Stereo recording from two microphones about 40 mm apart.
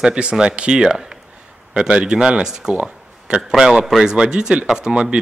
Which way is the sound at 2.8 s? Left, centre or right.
Right.